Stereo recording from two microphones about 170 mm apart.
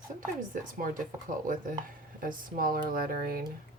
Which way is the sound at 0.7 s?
50° right (ahead or behind).